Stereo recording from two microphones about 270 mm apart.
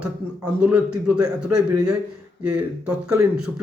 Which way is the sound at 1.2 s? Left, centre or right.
Centre.